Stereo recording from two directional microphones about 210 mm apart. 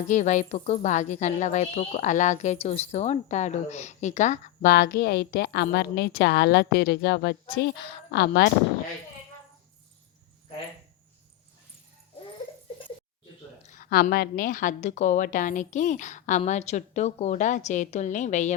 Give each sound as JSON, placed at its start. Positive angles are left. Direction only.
{"t": 0.1, "sound": "a woman's voice", "side_deg": 35}
{"t": 13.6, "sound": "speech", "side_deg": 40}